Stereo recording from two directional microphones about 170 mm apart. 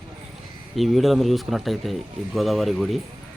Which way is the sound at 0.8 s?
Centre (ahead or behind).